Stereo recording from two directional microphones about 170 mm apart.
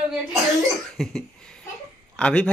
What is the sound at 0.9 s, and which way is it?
Cough, centre (ahead or behind).